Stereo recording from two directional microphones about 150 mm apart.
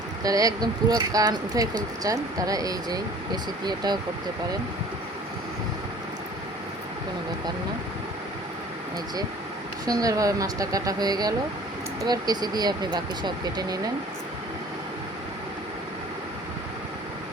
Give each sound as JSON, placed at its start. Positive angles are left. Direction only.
{"t": 0.2, "sound": "speech", "side_deg": -25}
{"t": 9.8, "sound": "speech", "side_deg": -25}